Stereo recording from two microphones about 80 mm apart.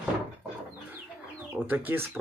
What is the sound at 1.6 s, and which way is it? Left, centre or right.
Speech, right.